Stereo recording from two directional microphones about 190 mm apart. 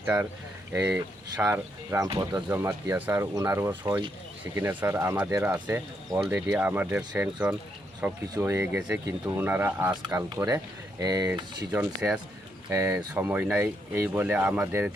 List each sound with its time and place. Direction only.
0.0 s speech: 10° right (ahead or behind)
4.5 s speech: 10° right (ahead or behind)
9.9 s speech: 20° right (ahead or behind)
11.7 s speech: 5° right (ahead or behind)